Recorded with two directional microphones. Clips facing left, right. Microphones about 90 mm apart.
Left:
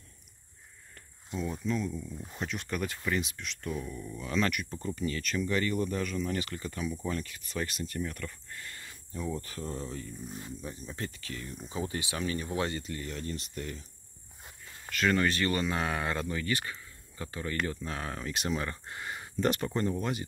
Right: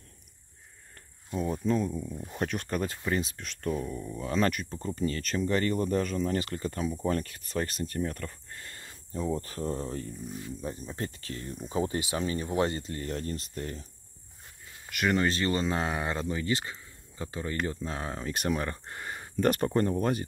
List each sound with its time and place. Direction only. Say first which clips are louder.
1.3 s speech: right 4 dB; 45° right (ahead or behind)
14.9 s speech: right 1 dB; 15° right (ahead or behind)
15.2 s speech: right 1 dB; 30° right (ahead or behind)
18.3 s speech: right 4 dB; 45° right (ahead or behind)